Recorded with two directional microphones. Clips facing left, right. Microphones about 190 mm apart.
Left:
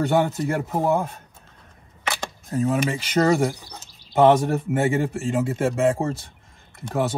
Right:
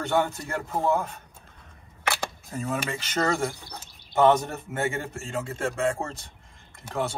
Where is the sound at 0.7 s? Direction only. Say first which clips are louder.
Even; 15° left (ahead or behind).